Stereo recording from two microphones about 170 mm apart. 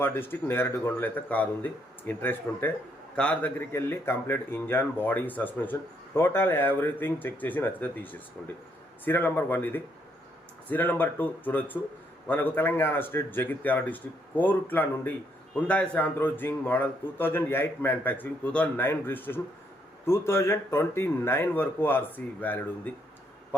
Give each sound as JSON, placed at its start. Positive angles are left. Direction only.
{"t": 0.0, "sound": "a man's voice", "side_deg": 15}